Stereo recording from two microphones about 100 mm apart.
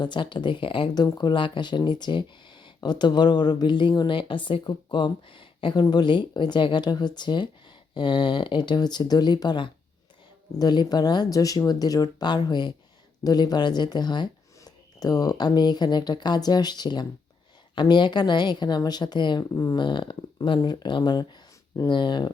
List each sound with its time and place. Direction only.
0.0 s speech: 50° left (ahead or behind)
1.0 s speech: 35° left (ahead or behind)
1.3 s speech: 55° left (ahead or behind)
19.8 s speech: 50° left (ahead or behind)